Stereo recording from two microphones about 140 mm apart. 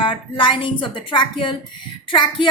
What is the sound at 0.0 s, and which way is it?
A woman's voice, 35° left (ahead or behind).